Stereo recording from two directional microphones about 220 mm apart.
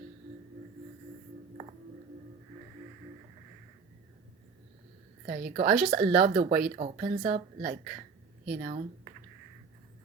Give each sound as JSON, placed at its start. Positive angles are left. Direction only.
{"t": 5.2, "sound": "a woman's voice", "side_deg": -40}
{"t": 6.7, "sound": "a woman's voice", "side_deg": -30}